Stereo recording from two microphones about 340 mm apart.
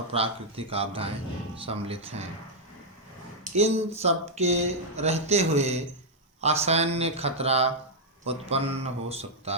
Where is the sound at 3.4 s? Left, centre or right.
Centre.